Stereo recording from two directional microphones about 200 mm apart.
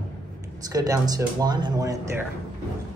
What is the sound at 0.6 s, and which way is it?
Speech, 20° right (ahead or behind).